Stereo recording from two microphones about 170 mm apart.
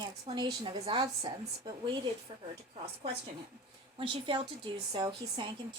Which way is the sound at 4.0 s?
30° right (ahead or behind).